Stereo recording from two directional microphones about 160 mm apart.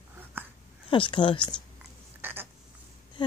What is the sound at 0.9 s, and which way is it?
Speech, 30° left (ahead or behind).